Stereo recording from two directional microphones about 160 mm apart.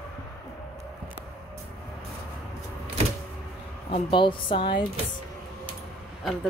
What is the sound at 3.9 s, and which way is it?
Speech, 35° left (ahead or behind).